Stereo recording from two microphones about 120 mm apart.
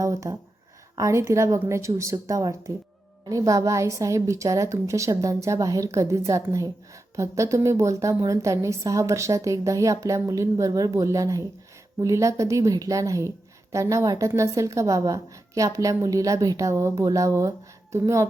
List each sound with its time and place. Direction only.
0.0 s a woman's voice: 25° right (ahead or behind)